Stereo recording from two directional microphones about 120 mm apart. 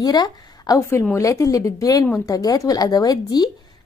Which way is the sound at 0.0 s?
35° left (ahead or behind).